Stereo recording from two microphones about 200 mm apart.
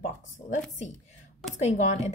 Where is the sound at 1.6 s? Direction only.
35° left (ahead or behind).